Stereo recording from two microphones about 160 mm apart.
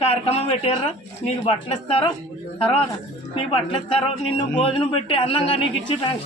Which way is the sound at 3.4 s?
30° left (ahead or behind).